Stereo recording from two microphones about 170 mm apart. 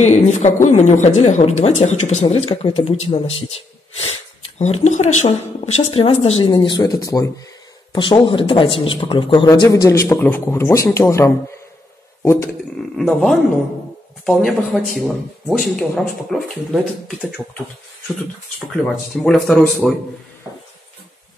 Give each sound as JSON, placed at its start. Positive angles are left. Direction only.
{"t": 0.0, "sound": "a woman's voice", "side_deg": 40}
{"t": 12.2, "sound": "a sound", "side_deg": 15}
{"t": 12.9, "sound": "speech", "side_deg": 0}
{"t": 19.2, "sound": "speech", "side_deg": 5}